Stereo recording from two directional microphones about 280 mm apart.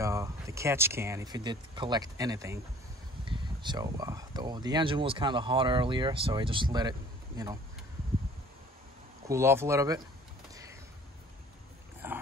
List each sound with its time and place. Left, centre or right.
0.0 s speech: centre
9.3 s speech: centre
12.0 s dog: centre